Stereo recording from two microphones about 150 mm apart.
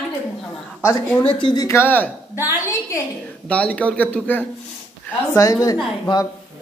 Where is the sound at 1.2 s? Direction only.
30° left (ahead or behind).